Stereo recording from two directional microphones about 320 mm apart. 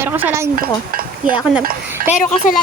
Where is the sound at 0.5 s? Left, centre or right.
Right.